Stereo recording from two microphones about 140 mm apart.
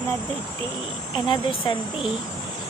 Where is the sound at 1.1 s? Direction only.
35° left (ahead or behind).